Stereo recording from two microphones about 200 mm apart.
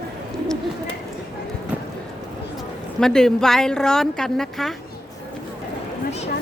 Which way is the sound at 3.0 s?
Centre (ahead or behind).